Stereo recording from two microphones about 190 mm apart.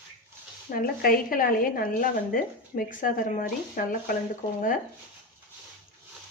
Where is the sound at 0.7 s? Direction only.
50° left (ahead or behind).